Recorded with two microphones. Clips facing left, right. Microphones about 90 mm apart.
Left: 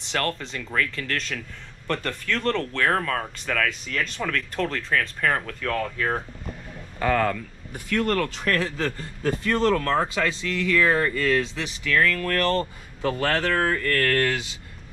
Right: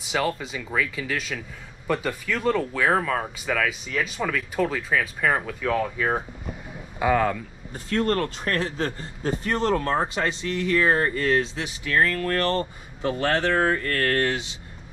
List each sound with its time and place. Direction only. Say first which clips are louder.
0.0 s speech: right 2 dB; 5° right (ahead or behind)
7.9 s a man's voice: even; 30° right (ahead or behind)